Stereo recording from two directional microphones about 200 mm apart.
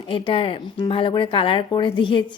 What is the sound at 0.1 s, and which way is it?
A woman's voice, 25° left (ahead or behind).